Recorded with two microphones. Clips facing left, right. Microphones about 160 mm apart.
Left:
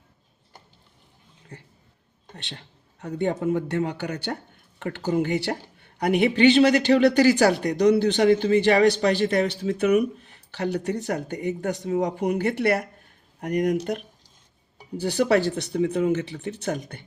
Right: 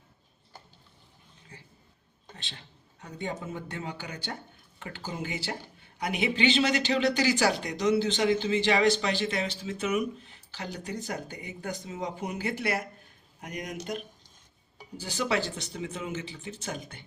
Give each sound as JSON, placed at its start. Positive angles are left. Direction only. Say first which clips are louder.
{"t": 2.3, "sound": "a man's voice", "louder": "left 6 dB", "side_deg": 65}
{"t": 14.9, "sound": "speech", "louder": "left 9 dB", "side_deg": 60}